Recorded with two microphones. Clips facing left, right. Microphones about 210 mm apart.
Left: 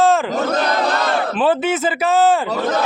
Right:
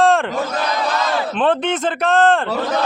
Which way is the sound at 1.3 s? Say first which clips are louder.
Even; 5° left (ahead or behind).